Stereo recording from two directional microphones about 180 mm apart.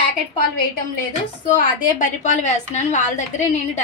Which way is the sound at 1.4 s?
45° left (ahead or behind).